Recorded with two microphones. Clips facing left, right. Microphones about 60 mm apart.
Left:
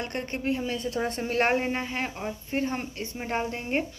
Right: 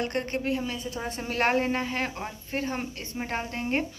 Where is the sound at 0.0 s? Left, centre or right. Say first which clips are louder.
Right 2 dB; left.